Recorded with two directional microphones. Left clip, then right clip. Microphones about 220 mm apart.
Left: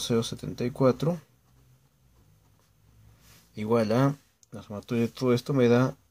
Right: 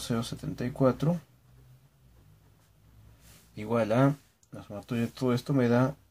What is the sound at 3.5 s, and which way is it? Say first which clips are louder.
Speech: left 3 dB; 35° left (ahead or behind).